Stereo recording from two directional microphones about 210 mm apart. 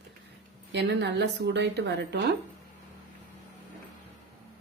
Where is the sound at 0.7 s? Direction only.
55° right (ahead or behind).